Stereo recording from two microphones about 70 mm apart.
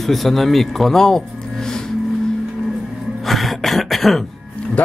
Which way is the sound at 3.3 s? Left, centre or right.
Centre.